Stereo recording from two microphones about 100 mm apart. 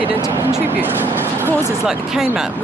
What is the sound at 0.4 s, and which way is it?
Speech, 25° right (ahead or behind).